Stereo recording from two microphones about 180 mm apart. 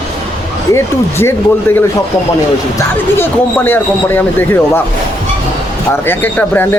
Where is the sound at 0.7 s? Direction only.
15° left (ahead or behind).